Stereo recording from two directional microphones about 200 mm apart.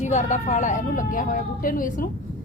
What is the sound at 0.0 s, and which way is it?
Speech, 35° left (ahead or behind).